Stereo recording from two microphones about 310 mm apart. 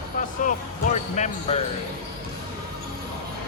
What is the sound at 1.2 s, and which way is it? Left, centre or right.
Speech, left.